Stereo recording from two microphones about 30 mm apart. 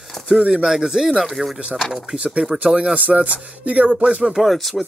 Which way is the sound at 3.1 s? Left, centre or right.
Right.